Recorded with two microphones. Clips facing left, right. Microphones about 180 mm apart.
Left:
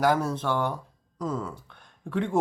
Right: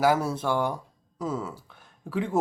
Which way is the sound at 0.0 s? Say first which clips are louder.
Right 1 dB; 10° right (ahead or behind).